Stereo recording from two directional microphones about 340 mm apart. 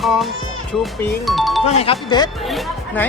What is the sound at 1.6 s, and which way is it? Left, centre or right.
Speech, centre.